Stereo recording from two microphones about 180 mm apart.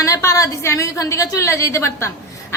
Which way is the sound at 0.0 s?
20° left (ahead or behind).